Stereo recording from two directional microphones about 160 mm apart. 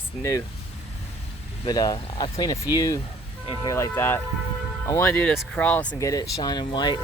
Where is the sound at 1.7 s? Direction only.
25° left (ahead or behind); by 5.9 s 10° left (ahead or behind).